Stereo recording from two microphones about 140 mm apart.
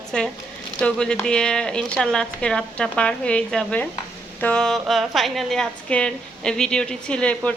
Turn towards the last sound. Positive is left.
turn(degrees=10)  # may be behind; listen again after turning